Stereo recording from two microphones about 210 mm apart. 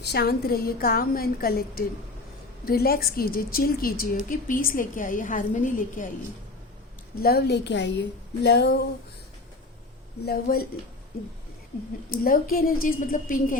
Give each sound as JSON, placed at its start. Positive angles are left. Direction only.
{"t": 0.0, "sound": "a woman's voice", "side_deg": 50}
{"t": 7.2, "sound": "a woman's voice", "side_deg": 50}
{"t": 10.2, "sound": "a woman's voice", "side_deg": 45}
{"t": 12.1, "sound": "a woman's voice", "side_deg": 45}